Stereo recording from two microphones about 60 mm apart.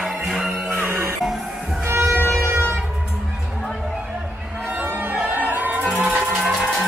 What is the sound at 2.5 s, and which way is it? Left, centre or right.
Music, right.